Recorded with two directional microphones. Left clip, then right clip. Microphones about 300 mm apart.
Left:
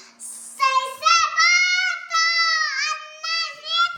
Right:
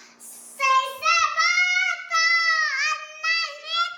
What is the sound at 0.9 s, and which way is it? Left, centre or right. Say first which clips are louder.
Child singing: left 3 dB; centre.